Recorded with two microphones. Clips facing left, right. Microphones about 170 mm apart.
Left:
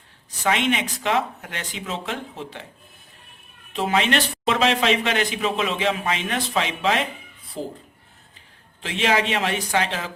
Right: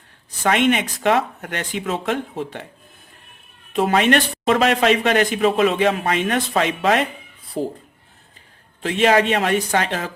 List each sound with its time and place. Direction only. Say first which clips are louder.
0.4 s speech: right 4 dB; 55° right (ahead or behind)
3.8 s speech: right 5 dB; 50° right (ahead or behind)
8.8 s speech: right 6 dB; 50° right (ahead or behind)